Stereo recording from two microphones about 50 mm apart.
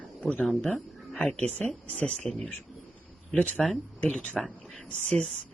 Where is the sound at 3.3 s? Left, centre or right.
Left.